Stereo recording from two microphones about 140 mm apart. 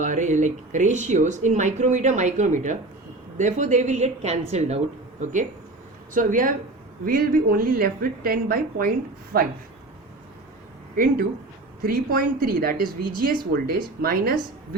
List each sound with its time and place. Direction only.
0.0 s speech: 65° right (ahead or behind)
7.0 s a woman's voice: 90° right
10.9 s a woman's voice: 90° right